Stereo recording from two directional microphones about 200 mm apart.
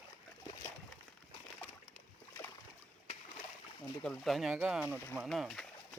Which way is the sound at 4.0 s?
Centre (ahead or behind).